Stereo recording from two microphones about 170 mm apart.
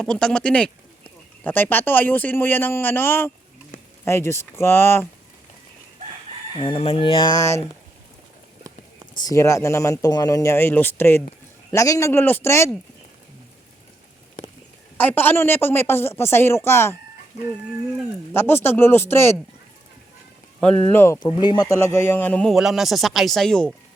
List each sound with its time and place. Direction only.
0.0 s speech: 5° left (ahead or behind)
6.6 s speech: 35° left (ahead or behind)
9.1 s speech: 20° left (ahead or behind)
14.9 s speech: 10° left (ahead or behind)
18.3 s speech: 15° left (ahead or behind)
20.6 s speech: 10° left (ahead or behind)
21.2 s a man's voice: 25° left (ahead or behind); by 23.6 s 5° left (ahead or behind)